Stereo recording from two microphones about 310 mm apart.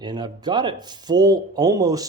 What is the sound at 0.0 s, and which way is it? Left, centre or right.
Speech, centre.